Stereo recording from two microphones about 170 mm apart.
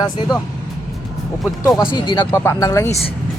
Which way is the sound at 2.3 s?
15° left (ahead or behind).